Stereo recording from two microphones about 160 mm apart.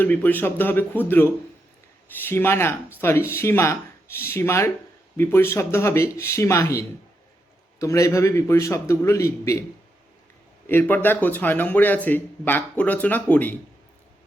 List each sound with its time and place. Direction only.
0.0 s a man's voice: 10° left (ahead or behind)
10.7 s a man's voice: 15° left (ahead or behind)